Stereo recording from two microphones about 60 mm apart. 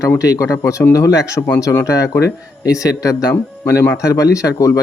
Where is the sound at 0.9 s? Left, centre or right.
Left.